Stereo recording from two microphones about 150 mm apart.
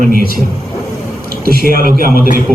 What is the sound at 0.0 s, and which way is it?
Speech, 80° right.